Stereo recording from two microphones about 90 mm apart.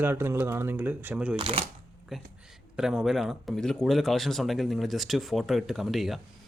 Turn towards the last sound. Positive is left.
turn(degrees=0)  # may be behind; listen again after turning